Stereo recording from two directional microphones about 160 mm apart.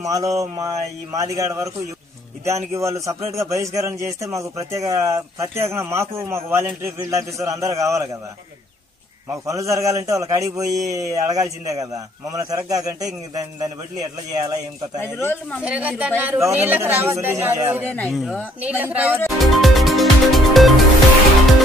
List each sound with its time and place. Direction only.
0.0 s a man's voice: 20° right (ahead or behind)
9.3 s a man's voice: 20° right (ahead or behind)
15.0 s speech: 15° left (ahead or behind)
15.6 s a man's voice: 5° right (ahead or behind)
18.1 s speech: 5° left (ahead or behind)
18.6 s a man's voice: 10° right (ahead or behind)
19.4 s music: centre (ahead or behind)